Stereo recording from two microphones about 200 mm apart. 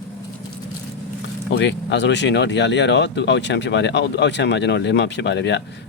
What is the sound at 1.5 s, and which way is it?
Speech, 60° left (ahead or behind).